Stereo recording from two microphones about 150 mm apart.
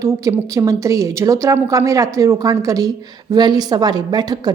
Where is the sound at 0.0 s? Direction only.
20° right (ahead or behind).